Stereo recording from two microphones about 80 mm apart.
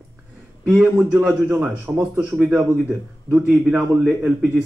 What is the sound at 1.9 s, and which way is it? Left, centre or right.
Speech, right.